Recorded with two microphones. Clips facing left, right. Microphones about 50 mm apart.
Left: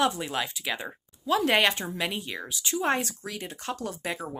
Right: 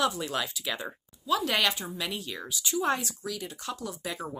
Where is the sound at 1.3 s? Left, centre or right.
Left.